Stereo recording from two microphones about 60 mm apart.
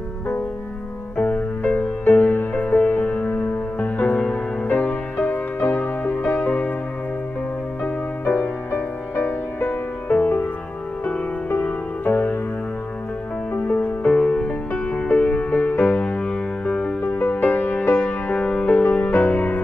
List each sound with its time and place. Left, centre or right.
1.1 s music: centre
1.6 s music: left; by 6.6 s centre
7.8 s music: left
12.0 s music: left
13.5 s music: left